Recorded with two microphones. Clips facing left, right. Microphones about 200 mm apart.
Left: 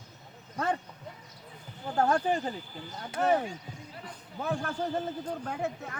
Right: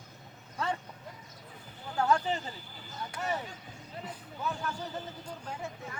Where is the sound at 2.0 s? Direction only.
50° left (ahead or behind).